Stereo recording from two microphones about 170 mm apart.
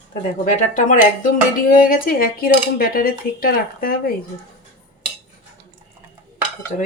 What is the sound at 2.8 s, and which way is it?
Speech, 60° left (ahead or behind).